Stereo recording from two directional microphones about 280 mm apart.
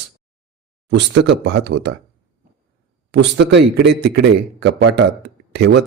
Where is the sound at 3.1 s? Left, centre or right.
Right.